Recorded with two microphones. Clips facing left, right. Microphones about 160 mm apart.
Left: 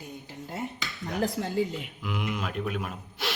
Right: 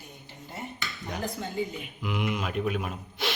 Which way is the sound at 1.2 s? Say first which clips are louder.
Left 5 dB; 80° left.